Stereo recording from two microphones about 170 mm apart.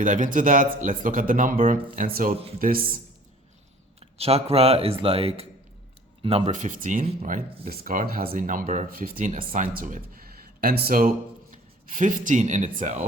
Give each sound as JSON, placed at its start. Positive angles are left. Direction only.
{"t": 0.0, "sound": "speech", "side_deg": -50}
{"t": 4.0, "sound": "speech", "side_deg": -35}
{"t": 6.6, "sound": "speech", "side_deg": -50}
{"t": 7.0, "sound": "speech", "side_deg": -40}
{"t": 10.6, "sound": "speech", "side_deg": -65}